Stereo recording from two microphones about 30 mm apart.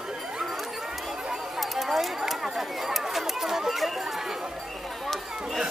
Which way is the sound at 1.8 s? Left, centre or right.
Centre.